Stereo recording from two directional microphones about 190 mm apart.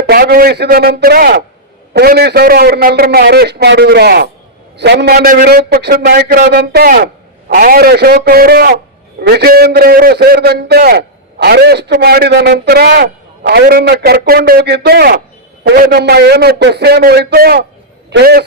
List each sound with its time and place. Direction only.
0.1 s a man's voice: 55° right (ahead or behind)